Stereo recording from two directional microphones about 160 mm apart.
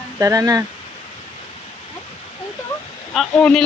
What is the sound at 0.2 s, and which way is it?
Speech, 20° right (ahead or behind).